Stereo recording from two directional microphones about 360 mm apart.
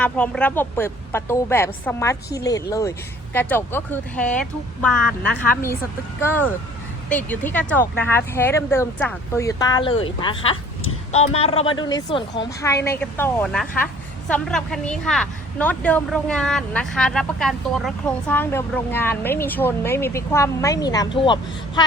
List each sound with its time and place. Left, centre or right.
0.0 s speech: centre